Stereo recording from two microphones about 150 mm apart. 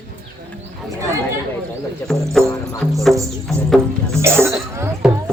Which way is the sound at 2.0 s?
5° left (ahead or behind).